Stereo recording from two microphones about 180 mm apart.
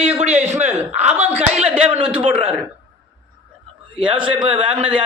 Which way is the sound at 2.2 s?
30° right (ahead or behind).